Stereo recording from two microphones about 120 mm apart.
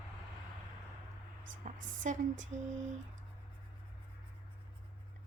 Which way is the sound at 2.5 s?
80° right.